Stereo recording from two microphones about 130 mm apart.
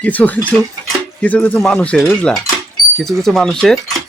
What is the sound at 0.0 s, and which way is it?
Speech, 10° left (ahead or behind).